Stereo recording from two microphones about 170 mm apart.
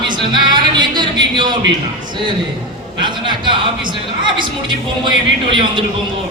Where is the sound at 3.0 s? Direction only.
30° right (ahead or behind).